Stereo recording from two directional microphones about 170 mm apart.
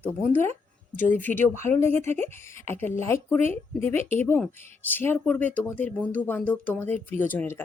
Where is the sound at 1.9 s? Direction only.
40° right (ahead or behind).